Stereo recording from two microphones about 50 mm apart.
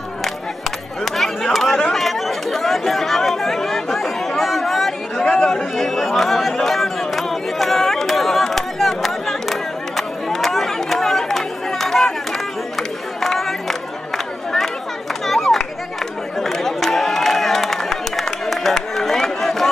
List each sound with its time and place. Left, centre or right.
0.2 s chatter: centre
15.2 s a sound: centre
16.3 s crowd: centre